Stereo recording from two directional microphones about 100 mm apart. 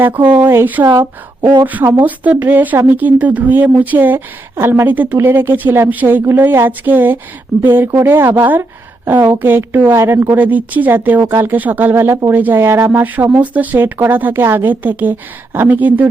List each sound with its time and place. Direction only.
0.3 s a woman's voice: 20° right (ahead or behind)